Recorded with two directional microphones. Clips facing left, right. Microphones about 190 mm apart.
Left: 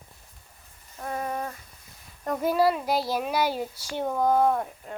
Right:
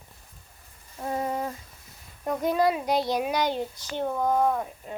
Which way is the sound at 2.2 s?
Centre (ahead or behind).